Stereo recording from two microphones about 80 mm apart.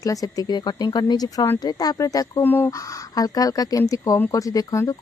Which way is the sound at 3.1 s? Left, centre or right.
Left.